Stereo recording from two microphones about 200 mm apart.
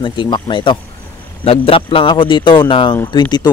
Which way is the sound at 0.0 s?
25° left (ahead or behind).